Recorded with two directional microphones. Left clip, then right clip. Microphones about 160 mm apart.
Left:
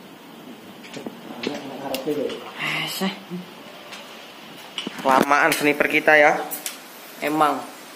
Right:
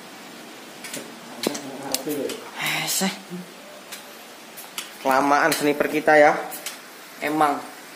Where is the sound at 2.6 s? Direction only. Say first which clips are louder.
Right 1 dB; 25° right (ahead or behind).